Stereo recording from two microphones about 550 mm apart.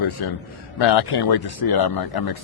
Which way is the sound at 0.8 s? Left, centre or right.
Left.